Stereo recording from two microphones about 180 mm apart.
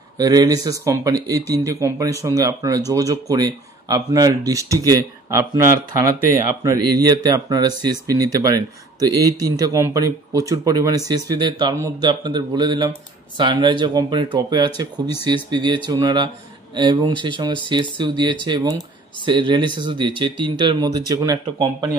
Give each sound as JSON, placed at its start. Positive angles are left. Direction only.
{"t": 0.2, "sound": "speech", "side_deg": -20}